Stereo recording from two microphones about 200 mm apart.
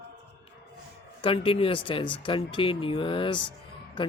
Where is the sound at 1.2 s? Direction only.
25° left (ahead or behind).